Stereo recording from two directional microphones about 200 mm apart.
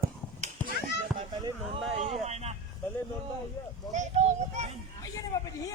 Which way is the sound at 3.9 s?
35° right (ahead or behind).